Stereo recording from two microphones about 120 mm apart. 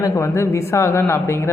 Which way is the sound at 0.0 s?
25° left (ahead or behind).